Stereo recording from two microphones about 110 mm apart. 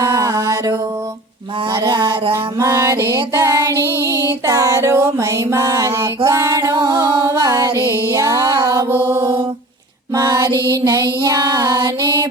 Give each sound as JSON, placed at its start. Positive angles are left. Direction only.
{"t": 0.0, "sound": "mantra", "side_deg": -30}
{"t": 1.8, "sound": "a sound", "side_deg": -40}
{"t": 2.3, "sound": "music", "side_deg": -25}
{"t": 6.2, "sound": "female singing", "side_deg": -30}
{"t": 7.8, "sound": "music", "side_deg": 25}
{"t": 8.1, "sound": "music", "side_deg": -30}
{"t": 9.0, "sound": "mantra", "side_deg": -30}
{"t": 10.2, "sound": "music", "side_deg": -30}